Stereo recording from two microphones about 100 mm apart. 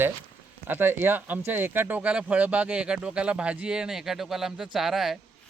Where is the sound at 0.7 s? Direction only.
20° right (ahead or behind).